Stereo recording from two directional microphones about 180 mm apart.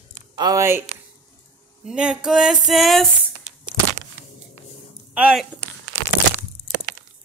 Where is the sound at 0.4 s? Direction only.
20° right (ahead or behind).